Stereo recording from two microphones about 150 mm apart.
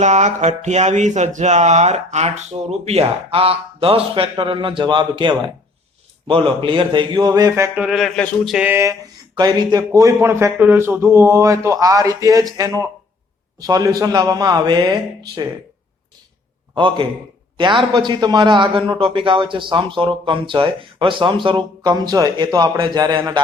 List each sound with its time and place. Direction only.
0.0 s a man's voice: 50° right (ahead or behind); by 7.7 s 20° right (ahead or behind)
7.8 s speech: 5° right (ahead or behind)
8.6 s speech: 15° right (ahead or behind)
16.7 s a man's voice: 35° right (ahead or behind)